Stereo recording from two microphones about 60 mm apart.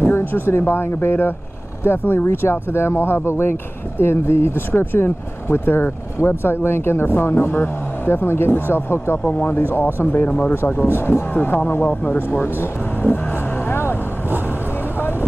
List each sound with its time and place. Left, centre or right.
0.0 s speech: left
13.7 s vehicle: left